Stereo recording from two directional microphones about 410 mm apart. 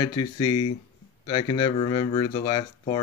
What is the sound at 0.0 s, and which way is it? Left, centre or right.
Speech, centre.